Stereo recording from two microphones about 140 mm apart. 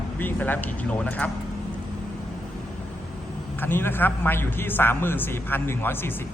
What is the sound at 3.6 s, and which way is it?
A man's voice, 15° left (ahead or behind).